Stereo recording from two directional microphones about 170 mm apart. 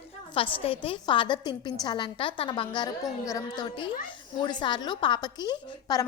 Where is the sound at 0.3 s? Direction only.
30° left (ahead or behind).